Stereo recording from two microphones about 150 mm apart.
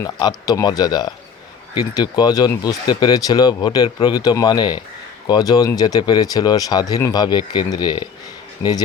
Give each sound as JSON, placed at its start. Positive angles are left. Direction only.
{"t": 0.0, "sound": "speech", "side_deg": 25}